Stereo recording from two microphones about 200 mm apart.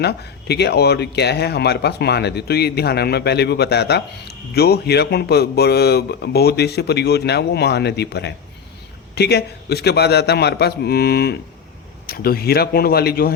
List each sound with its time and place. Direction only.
0.0 s a man's voice: 55° left (ahead or behind)